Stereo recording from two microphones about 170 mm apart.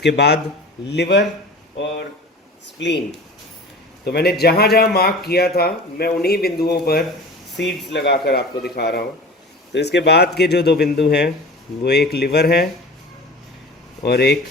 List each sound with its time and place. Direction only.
0.0 s speech: 85° left
2.7 s speech: 90° left
4.0 s speech: 70° left (ahead or behind)
7.6 s speech: 90° left; by 12.6 s 70° left (ahead or behind)
14.0 s speech: 75° left (ahead or behind)